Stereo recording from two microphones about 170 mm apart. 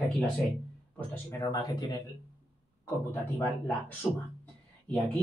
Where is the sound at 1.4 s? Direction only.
20° left (ahead or behind).